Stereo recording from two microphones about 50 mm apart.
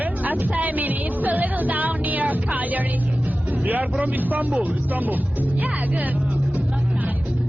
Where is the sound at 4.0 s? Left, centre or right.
Right.